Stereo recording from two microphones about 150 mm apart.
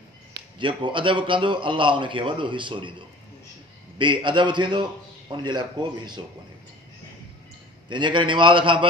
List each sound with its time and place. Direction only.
0.6 s a man's voice: 30° right (ahead or behind)
4.0 s a man's voice: 30° right (ahead or behind)
7.9 s a man's voice: 30° right (ahead or behind)